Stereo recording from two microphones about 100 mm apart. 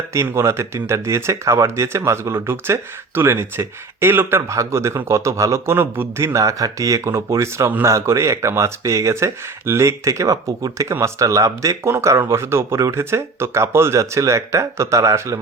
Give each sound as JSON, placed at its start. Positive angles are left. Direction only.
{"t": 0.1, "sound": "a man's voice", "side_deg": -30}